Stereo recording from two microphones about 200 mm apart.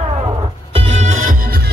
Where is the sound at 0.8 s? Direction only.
35° right (ahead or behind); by 1.7 s 50° right (ahead or behind).